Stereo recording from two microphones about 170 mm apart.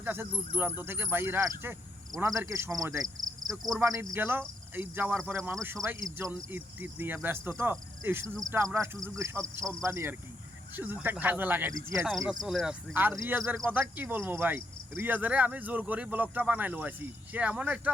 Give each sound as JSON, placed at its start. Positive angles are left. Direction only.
{"t": 0.0, "sound": "speech", "side_deg": -10}
{"t": 12.3, "sound": "speech", "side_deg": 0}